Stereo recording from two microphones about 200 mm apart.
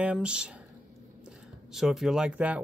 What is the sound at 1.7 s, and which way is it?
Speech, centre (ahead or behind).